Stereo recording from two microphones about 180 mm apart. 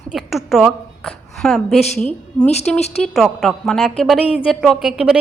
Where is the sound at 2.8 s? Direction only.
35° left (ahead or behind).